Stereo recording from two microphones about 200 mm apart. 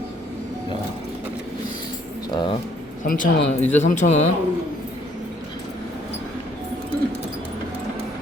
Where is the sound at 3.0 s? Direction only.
40° left (ahead or behind).